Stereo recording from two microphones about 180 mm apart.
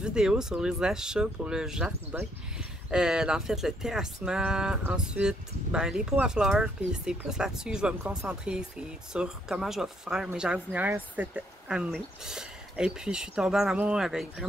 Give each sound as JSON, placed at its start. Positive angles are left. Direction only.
{"t": 0.0, "sound": "speech", "side_deg": -5}